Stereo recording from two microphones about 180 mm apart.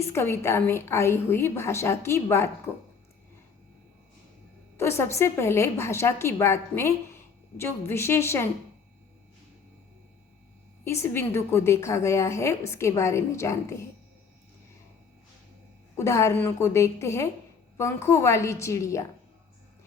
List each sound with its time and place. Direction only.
0.1 s a woman's voice: 15° left (ahead or behind)
4.8 s a woman's voice: 15° left (ahead or behind)
10.8 s a woman's voice: 15° left (ahead or behind)
16.0 s a woman's voice: 15° left (ahead or behind)